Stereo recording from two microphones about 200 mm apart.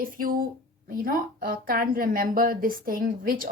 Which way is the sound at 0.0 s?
45° right (ahead or behind).